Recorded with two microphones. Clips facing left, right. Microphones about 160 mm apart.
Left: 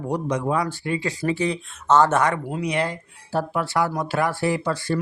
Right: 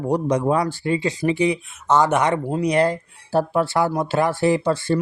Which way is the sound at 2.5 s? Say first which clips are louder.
Right 6 dB; 40° right (ahead or behind).